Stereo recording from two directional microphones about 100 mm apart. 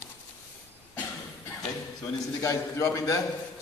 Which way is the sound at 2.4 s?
30° left (ahead or behind).